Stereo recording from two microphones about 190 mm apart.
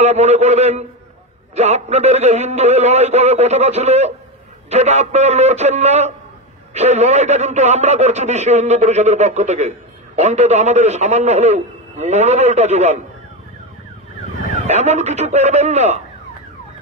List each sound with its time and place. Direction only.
0.0 s speech: 35° right (ahead or behind)
14.7 s speech: 35° right (ahead or behind)